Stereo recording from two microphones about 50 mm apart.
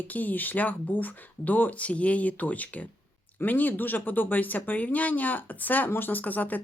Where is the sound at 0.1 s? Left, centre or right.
Left.